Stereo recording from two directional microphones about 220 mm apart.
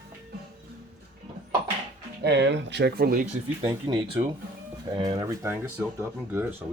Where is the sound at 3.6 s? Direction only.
15° right (ahead or behind).